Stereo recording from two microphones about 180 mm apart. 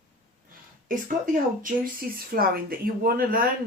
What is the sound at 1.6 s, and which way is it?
Speech, 55° right (ahead or behind).